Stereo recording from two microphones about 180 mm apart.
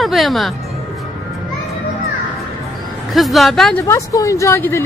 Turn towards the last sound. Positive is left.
turn(degrees=15)  # may be behind; listen again after turning